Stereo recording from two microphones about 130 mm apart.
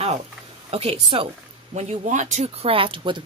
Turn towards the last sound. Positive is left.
turn(degrees=-40)  # may be behind; listen again after turning